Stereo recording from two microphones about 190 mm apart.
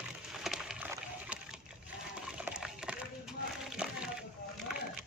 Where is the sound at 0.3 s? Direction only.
Centre (ahead or behind).